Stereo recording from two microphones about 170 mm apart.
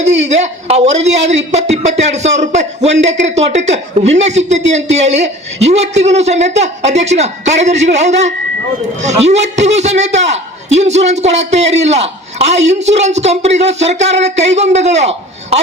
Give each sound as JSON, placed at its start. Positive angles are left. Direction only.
{"t": 0.0, "sound": "a man's voice", "side_deg": -40}